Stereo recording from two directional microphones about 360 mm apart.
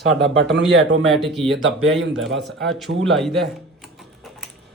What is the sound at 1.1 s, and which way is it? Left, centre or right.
Speech, centre.